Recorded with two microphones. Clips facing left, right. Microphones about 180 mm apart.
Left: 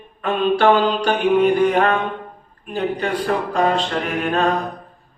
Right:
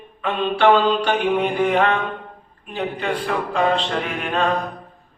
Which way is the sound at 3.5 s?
40° left (ahead or behind).